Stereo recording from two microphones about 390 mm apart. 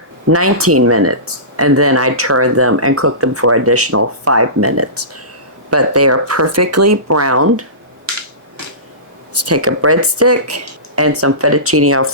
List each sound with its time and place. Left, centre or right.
0.3 s speech: right
9.3 s speech: right